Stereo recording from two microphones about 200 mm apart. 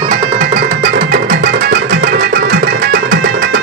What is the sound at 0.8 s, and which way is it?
Music, 50° right (ahead or behind).